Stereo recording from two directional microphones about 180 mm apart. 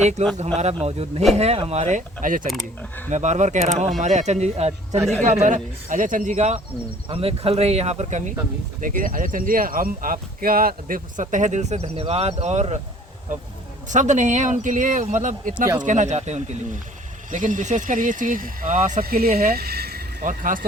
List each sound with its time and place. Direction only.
0.0 s speech: 40° right (ahead or behind)
13.9 s speech: 40° right (ahead or behind)